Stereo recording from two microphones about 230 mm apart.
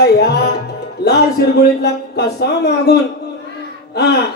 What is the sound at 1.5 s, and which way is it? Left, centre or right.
Speech, left.